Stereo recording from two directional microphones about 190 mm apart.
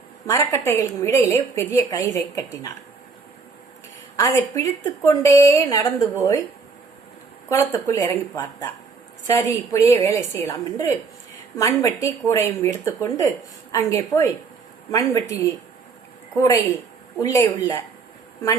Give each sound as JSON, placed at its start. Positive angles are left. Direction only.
{"t": 0.3, "sound": "a woman's voice", "side_deg": 15}
{"t": 4.2, "sound": "a woman's voice", "side_deg": 15}
{"t": 7.5, "sound": "a woman's voice", "side_deg": 15}
{"t": 9.2, "sound": "a woman's voice", "side_deg": 15}